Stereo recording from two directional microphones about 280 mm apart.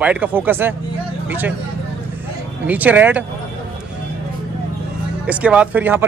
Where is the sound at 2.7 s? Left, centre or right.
Centre.